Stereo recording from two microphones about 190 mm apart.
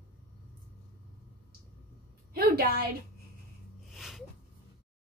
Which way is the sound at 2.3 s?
50° right (ahead or behind).